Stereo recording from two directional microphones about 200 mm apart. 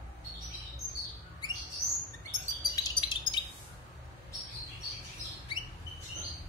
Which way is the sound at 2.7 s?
20° left (ahead or behind).